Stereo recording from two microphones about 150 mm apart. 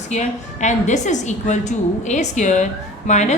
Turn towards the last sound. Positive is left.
turn(degrees=50)  # may be behind; listen again after turning